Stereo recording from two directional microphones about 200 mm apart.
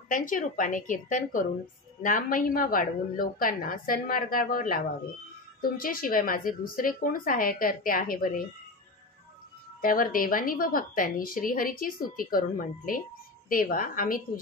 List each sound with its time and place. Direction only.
0.1 s a woman's voice: 40° left (ahead or behind)
9.8 s a woman's voice: 45° left (ahead or behind)